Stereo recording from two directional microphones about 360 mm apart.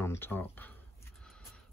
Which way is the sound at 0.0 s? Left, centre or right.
Centre.